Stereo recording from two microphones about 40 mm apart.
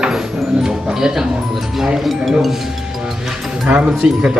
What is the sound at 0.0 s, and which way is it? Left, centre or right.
Music, centre.